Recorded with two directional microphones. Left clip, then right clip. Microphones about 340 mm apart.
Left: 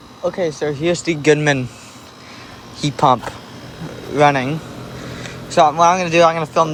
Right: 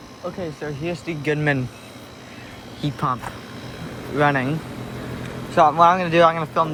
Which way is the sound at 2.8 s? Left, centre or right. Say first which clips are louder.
Left 10 dB; centre.